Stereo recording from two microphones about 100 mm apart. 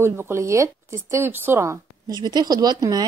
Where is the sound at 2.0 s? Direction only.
45° right (ahead or behind).